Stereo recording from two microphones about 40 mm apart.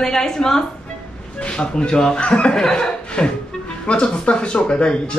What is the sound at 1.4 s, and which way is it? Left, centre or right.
Speech, left.